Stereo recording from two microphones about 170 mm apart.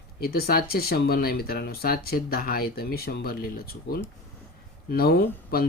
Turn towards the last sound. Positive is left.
turn(degrees=60)  # may be behind; listen again after turning